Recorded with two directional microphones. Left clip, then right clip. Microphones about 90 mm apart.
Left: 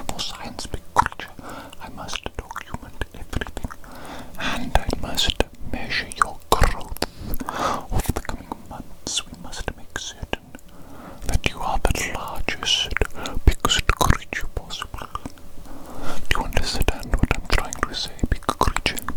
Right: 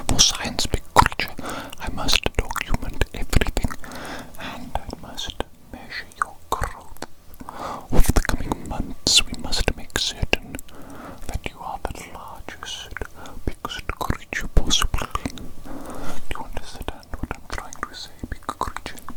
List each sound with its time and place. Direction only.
0.2 s whispering: 35° right (ahead or behind)
1.5 s whispering: 25° right (ahead or behind)
2.0 s whispering: 45° right (ahead or behind)
3.9 s a sound: 25° right (ahead or behind)
4.4 s whispering: 5° left (ahead or behind)
5.0 s whispering: 45° left (ahead or behind)
7.6 s biting: 20° left (ahead or behind)
8.0 s biting: 15° right (ahead or behind)
8.4 s whispering: 30° right (ahead or behind)
9.1 s whispering: 45° right (ahead or behind)
11.4 s whispering: 30° left (ahead or behind)
14.3 s whispering: centre (ahead or behind)
14.7 s whispering: 40° right (ahead or behind)
16.3 s whispering: 45° left (ahead or behind)